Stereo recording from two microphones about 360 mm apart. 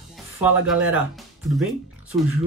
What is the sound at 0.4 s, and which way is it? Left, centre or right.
Speech, centre.